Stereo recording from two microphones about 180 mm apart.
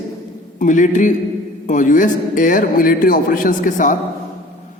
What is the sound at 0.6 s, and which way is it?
A man's voice, 45° left (ahead or behind).